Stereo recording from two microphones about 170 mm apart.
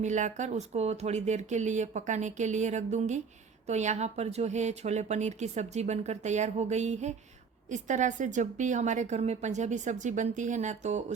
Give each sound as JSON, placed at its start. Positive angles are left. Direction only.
{"t": 0.0, "sound": "a woman's voice", "side_deg": -45}